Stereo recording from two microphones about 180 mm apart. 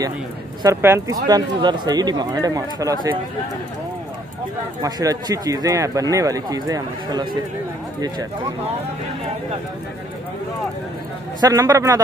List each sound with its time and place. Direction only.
0.6 s speech: 15° right (ahead or behind)
4.8 s speech: 20° right (ahead or behind)
11.4 s speech: 20° right (ahead or behind)